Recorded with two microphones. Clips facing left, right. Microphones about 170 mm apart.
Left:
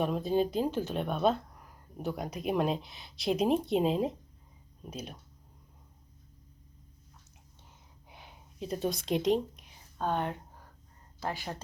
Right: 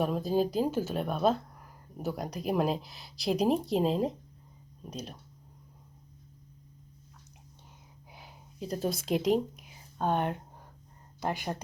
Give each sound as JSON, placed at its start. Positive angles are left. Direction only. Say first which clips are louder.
{"t": 0.0, "sound": "speech", "louder": "right 1 dB", "side_deg": 0}
{"t": 8.0, "sound": "a sound", "louder": "right 1 dB", "side_deg": 0}
{"t": 10.0, "sound": "speech", "louder": "right 3 dB", "side_deg": -15}